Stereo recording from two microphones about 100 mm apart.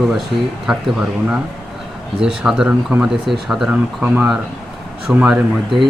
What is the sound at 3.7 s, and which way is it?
Speech, 15° right (ahead or behind).